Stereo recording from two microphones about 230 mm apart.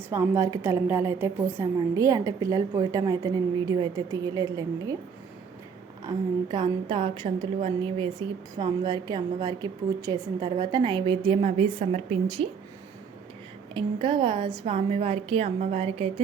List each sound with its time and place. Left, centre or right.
0.1 s a woman's voice: centre
6.1 s a woman's voice: centre
13.7 s a woman's voice: right